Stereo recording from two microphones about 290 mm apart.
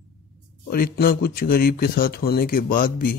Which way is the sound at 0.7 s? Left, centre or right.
Left.